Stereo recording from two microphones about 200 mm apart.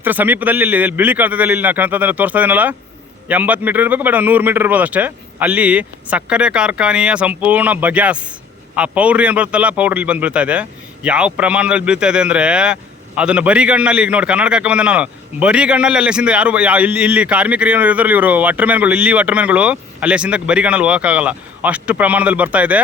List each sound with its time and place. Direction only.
0.0 s a man's voice: 10° right (ahead or behind)